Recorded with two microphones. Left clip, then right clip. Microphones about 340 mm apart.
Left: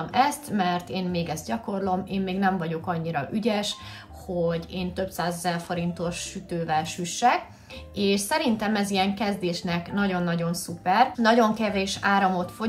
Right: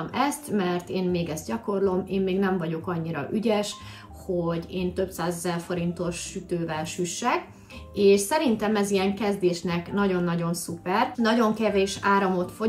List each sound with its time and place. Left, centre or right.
0.5 s a woman's voice: centre